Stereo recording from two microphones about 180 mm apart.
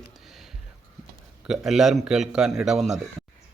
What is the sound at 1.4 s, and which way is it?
A man's voice, centre (ahead or behind).